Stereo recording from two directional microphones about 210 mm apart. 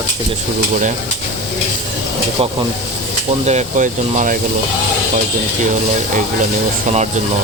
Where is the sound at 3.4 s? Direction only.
35° right (ahead or behind).